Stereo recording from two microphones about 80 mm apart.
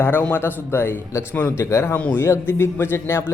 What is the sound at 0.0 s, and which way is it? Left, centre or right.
A man's voice, left.